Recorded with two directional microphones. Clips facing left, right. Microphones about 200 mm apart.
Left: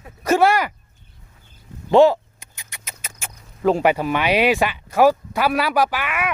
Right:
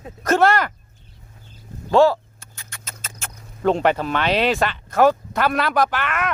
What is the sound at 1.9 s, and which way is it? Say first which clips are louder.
Rodents: left 2 dB; 20° left (ahead or behind).